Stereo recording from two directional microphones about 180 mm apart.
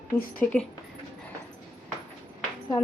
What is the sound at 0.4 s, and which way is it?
Speech, 10° left (ahead or behind).